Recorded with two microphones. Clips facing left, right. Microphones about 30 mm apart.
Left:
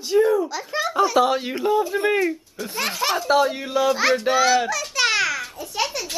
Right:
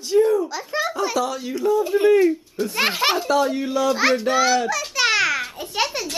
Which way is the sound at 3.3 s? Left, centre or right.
Centre.